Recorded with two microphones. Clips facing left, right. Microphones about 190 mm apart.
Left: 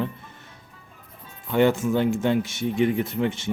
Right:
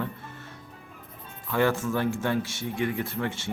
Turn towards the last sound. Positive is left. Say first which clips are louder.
# left 6 dB
turn(degrees=20)  # may be behind; listen again after turning